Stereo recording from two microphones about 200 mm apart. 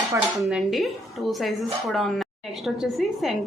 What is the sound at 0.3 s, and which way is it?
A woman's voice, centre (ahead or behind).